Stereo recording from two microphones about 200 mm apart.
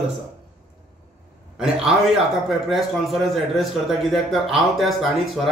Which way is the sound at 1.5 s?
Centre (ahead or behind).